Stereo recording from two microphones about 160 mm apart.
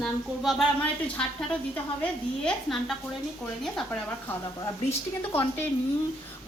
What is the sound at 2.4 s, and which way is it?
A woman's voice, centre (ahead or behind).